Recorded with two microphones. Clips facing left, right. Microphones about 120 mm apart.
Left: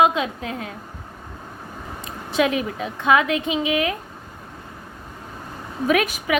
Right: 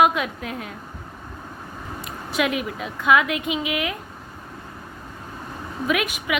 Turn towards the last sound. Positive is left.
turn(degrees=40)  # may be behind; listen again after turning